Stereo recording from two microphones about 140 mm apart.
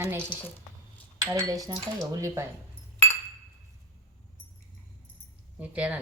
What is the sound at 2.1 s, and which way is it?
Speech, 20° right (ahead or behind).